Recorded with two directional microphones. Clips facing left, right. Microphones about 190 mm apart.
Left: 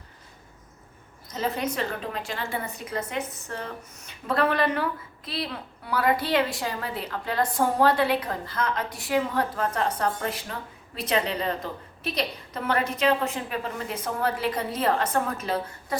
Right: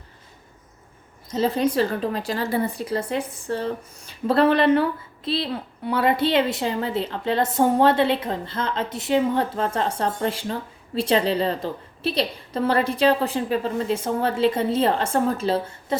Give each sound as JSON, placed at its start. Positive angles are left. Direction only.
{"t": 1.3, "sound": "a woman's voice", "side_deg": -30}